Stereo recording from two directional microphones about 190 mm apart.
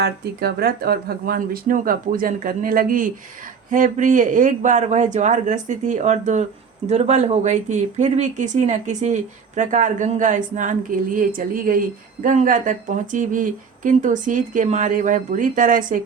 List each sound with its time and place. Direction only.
0.0 s speech: 55° right (ahead or behind)